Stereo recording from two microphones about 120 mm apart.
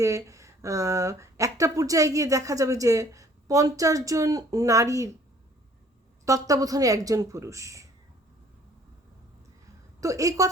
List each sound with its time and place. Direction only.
0.0 s speech: 25° right (ahead or behind)
6.2 s speech: 30° right (ahead or behind)
10.0 s speech: 30° right (ahead or behind)